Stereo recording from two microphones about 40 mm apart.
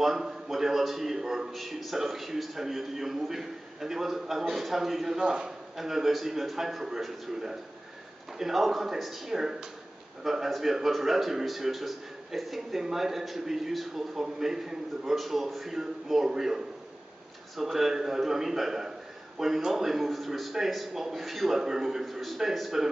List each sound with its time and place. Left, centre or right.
0.0 s a man's voice: centre
5.2 s a man's voice: right
5.8 s a man's voice: centre